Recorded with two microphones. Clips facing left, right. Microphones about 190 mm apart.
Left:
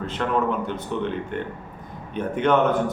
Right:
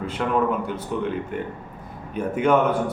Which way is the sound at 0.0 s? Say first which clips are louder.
Right 1 dB; 10° right (ahead or behind).